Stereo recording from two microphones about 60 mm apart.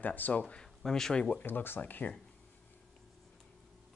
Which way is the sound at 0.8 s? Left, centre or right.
Centre.